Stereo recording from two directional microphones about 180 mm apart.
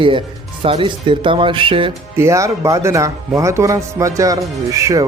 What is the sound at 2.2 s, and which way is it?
Speech, 15° right (ahead or behind).